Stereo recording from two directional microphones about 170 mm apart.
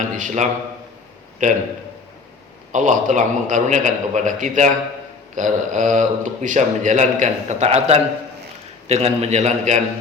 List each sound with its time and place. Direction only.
0.0 s a man's voice: 50° right (ahead or behind)
2.7 s a man's voice: 45° right (ahead or behind)